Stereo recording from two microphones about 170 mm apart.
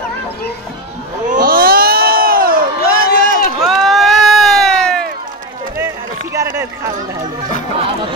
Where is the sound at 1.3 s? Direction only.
60° right (ahead or behind).